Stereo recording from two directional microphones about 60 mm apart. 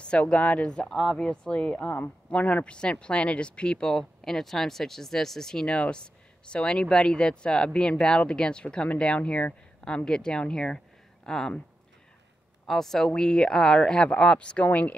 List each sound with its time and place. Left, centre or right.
0.0 s speech: centre
12.6 s speech: centre; by 15.0 s left